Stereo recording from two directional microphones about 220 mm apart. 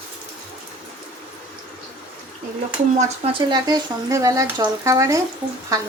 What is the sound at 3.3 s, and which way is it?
Speech, 20° right (ahead or behind).